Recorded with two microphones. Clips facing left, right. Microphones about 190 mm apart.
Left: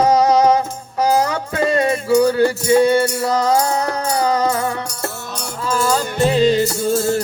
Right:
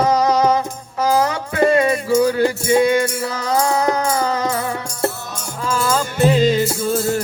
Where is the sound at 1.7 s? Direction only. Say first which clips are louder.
Left 3 dB; 35° left (ahead or behind).